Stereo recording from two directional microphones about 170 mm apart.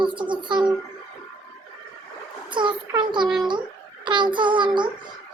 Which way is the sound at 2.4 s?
30° right (ahead or behind).